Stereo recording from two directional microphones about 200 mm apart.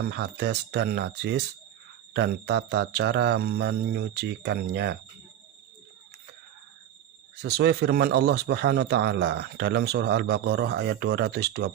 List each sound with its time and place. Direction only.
0.1 s speech: 55° right (ahead or behind)
7.4 s speech: 55° right (ahead or behind)